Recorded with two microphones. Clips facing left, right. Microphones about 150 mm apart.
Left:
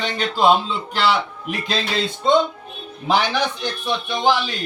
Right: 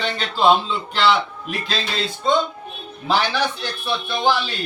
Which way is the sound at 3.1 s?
20° left (ahead or behind).